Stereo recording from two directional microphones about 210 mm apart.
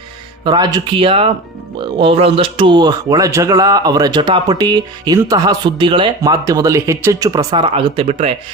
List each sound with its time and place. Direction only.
0.4 s speech: 20° right (ahead or behind)